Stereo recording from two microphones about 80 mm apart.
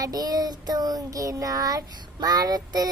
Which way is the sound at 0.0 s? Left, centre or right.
Right.